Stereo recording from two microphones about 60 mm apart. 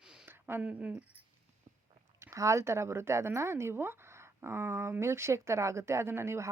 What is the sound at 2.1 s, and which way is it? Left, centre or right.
Speech, right.